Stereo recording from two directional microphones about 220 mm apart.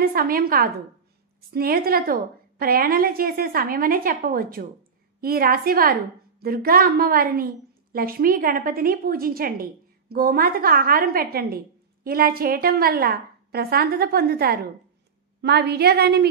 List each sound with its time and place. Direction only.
0.0 s a woman's voice: 40° right (ahead or behind)